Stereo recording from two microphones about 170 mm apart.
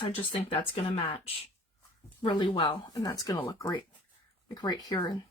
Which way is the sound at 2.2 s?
30° left (ahead or behind).